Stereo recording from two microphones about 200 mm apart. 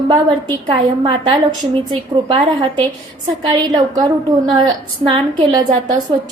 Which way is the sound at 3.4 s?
20° right (ahead or behind).